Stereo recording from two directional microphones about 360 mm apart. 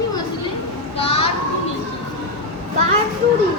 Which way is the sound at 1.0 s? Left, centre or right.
Centre.